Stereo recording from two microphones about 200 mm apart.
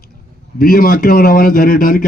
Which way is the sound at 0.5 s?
45° left (ahead or behind).